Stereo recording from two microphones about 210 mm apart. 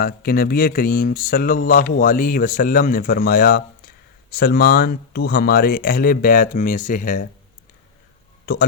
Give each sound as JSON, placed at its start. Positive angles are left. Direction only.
{"t": 0.0, "sound": "speech", "side_deg": 45}